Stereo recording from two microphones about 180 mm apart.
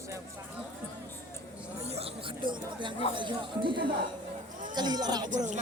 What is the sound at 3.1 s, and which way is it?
Speech, 25° right (ahead or behind).